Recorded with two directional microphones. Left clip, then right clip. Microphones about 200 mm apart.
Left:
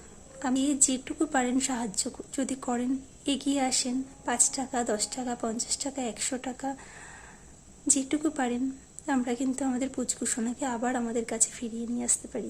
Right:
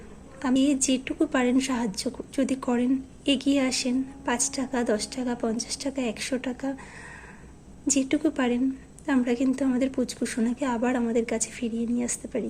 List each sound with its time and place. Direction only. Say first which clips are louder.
0.3 s a woman's voice: right 4 dB; 15° left (ahead or behind)
7.9 s a woman's voice: right 4 dB; 15° left (ahead or behind)